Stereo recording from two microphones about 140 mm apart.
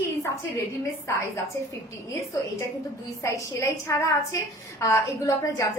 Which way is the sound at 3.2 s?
20° left (ahead or behind).